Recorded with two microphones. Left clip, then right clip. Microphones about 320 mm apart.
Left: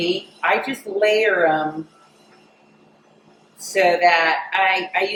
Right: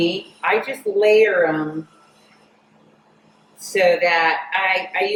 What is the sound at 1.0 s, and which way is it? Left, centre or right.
Speech, centre.